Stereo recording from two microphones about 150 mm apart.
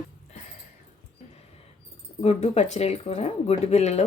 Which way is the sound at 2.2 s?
45° left (ahead or behind).